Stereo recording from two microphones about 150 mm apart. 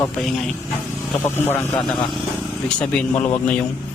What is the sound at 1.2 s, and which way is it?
Speech, 15° left (ahead or behind).